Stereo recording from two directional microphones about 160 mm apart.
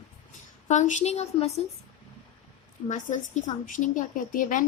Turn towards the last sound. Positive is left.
turn(degrees=55)  # may be behind; listen again after turning